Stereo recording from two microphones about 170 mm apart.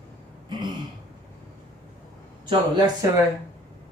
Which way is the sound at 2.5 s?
25° right (ahead or behind).